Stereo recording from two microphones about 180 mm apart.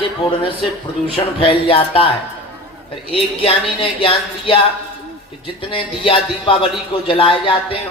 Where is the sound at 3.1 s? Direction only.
30° left (ahead or behind).